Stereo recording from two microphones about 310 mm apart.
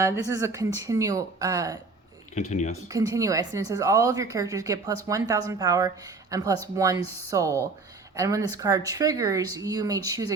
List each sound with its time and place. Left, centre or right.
0.0 s a woman's voice: centre
2.3 s speech: left
2.9 s a woman's voice: centre